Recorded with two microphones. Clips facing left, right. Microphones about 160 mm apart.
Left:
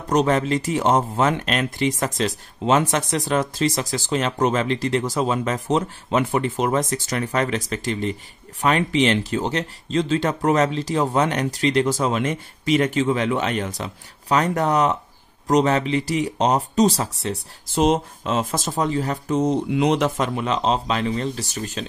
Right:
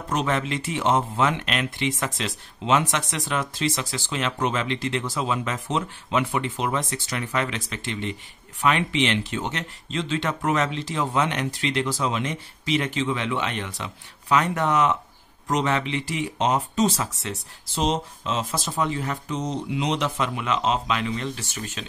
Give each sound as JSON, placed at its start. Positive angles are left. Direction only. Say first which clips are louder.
{"t": 0.1, "sound": "speech", "louder": "left 6 dB", "side_deg": 40}
{"t": 17.7, "sound": "speech", "louder": "left 6 dB", "side_deg": 50}
{"t": 19.3, "sound": "speech", "louder": "left 9 dB", "side_deg": 55}